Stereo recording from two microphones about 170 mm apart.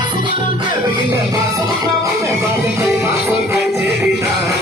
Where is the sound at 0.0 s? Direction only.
30° right (ahead or behind).